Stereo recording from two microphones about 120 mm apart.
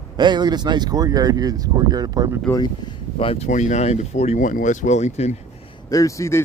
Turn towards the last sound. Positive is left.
turn(degrees=25)  # may be behind; listen again after turning